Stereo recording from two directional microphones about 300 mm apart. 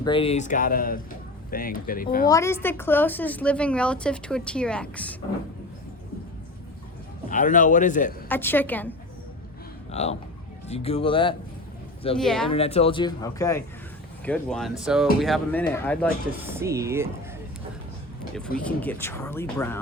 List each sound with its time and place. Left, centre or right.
0.0 s speech: centre
2.2 s a woman's voice: centre
7.3 s speech: left
8.3 s a woman's voice: centre
9.9 s speech: left
12.1 s a woman's voice: centre
12.5 s a woman's voice: centre
16.5 s speech: centre
18.3 s speech: centre